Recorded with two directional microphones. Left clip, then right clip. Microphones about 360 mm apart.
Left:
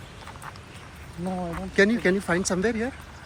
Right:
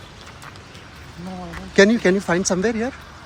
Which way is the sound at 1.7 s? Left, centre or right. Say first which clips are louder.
Right 6 dB; centre.